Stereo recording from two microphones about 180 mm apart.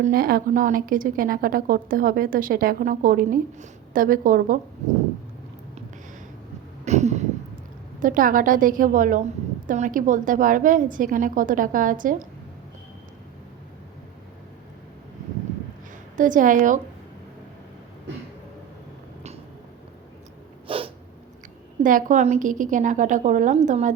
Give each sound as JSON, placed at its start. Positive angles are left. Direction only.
{"t": 0.0, "sound": "a woman's voice", "side_deg": -55}
{"t": 6.8, "sound": "a sound", "side_deg": -40}
{"t": 7.9, "sound": "a woman's voice", "side_deg": -50}
{"t": 16.1, "sound": "a woman's voice", "side_deg": -45}
{"t": 20.7, "sound": "cat", "side_deg": -30}
{"t": 21.8, "sound": "a woman's voice", "side_deg": -45}